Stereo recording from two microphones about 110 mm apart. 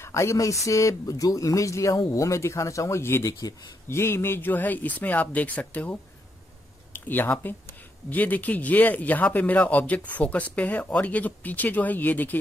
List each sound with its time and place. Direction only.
0.0 s speech: 25° left (ahead or behind)